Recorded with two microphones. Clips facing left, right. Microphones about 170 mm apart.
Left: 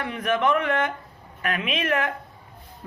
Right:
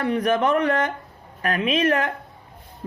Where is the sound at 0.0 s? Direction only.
35° right (ahead or behind).